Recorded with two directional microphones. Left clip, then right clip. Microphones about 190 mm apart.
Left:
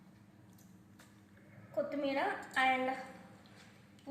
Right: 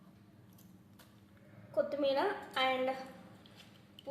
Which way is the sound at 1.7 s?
60° right (ahead or behind).